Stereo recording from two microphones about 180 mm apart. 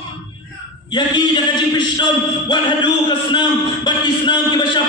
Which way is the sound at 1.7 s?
25° left (ahead or behind).